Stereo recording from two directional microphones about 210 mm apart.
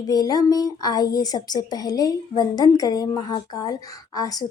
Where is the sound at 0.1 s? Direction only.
20° left (ahead or behind).